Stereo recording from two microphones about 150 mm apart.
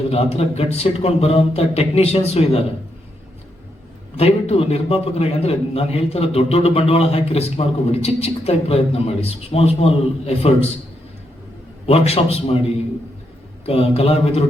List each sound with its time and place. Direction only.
0.1 s a man's voice: 45° left (ahead or behind)
4.2 s a man's voice: 40° left (ahead or behind)
11.9 s a man's voice: 45° left (ahead or behind)
13.7 s speech: 40° left (ahead or behind)